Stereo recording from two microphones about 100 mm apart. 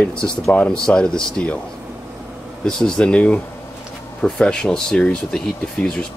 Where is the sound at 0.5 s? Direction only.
15° left (ahead or behind).